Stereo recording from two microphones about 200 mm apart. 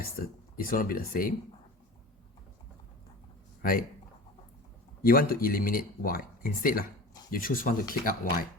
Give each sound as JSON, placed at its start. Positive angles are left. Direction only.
{"t": 0.5, "sound": "speech", "side_deg": 45}
{"t": 3.6, "sound": "speech", "side_deg": 45}
{"t": 5.0, "sound": "speech", "side_deg": 45}